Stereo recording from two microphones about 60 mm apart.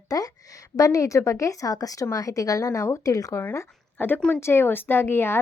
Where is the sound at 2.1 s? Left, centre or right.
Left.